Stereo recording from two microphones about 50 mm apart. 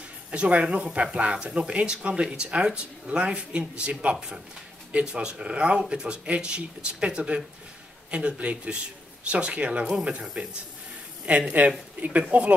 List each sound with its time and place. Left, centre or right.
0.3 s speech: right